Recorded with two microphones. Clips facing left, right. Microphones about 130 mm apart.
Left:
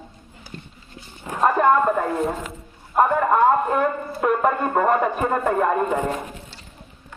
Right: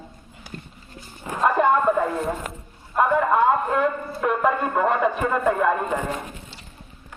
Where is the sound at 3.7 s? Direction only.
45° left (ahead or behind).